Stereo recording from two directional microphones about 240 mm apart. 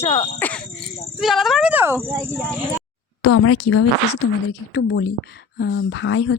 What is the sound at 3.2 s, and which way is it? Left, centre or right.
Speech, left.